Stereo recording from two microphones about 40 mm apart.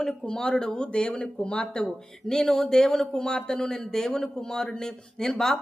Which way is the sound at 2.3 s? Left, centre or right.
Centre.